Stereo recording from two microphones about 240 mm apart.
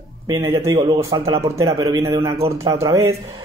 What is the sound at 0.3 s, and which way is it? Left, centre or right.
Speech, centre.